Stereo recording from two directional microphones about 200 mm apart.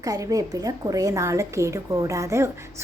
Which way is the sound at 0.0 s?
15° right (ahead or behind).